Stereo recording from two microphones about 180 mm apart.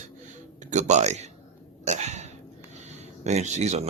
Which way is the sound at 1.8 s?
40° right (ahead or behind).